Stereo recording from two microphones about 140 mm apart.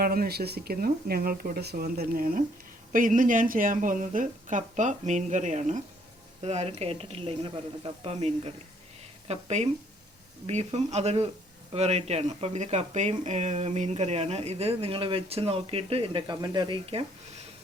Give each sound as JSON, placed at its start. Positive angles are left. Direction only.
{"t": 0.0, "sound": "speech", "side_deg": -90}
{"t": 2.9, "sound": "speech", "side_deg": -70}